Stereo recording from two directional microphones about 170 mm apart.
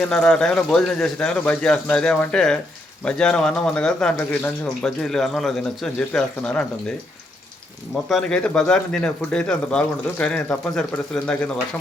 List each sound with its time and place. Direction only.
0.0 s speech: 5° left (ahead or behind)
8.1 s speech: 5° left (ahead or behind)